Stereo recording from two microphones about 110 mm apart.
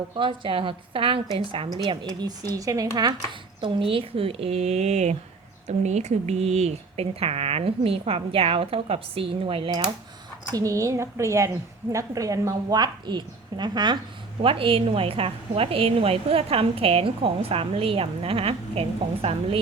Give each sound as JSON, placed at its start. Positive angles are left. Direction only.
{"t": 0.2, "sound": "a woman's voice", "side_deg": -50}
{"t": 3.6, "sound": "a woman's voice", "side_deg": -55}
{"t": 10.5, "sound": "a woman's voice", "side_deg": -30}
{"t": 14.4, "sound": "a woman's voice", "side_deg": -55}